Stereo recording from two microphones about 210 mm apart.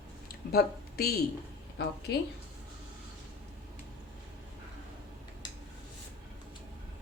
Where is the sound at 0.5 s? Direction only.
45° left (ahead or behind).